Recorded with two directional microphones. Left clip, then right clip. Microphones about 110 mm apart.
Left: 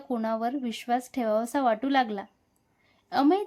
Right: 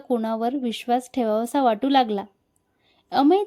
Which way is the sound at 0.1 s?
45° right (ahead or behind).